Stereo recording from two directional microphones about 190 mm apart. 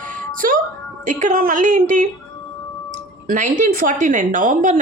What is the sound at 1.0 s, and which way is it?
A woman's voice, 40° right (ahead or behind).